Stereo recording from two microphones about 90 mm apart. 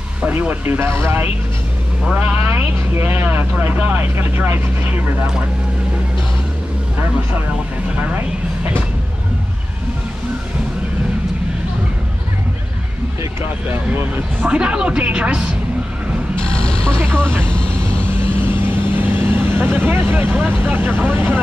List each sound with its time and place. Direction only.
0.3 s speech: 20° right (ahead or behind)
8.0 s speech: 20° right (ahead or behind)
13.2 s speech: 25° right (ahead or behind)
14.6 s speech: 15° right (ahead or behind)
17.0 s speech: 25° right (ahead or behind)
17.5 s vehicle: 10° left (ahead or behind)
18.4 s vehicle: 25° right (ahead or behind)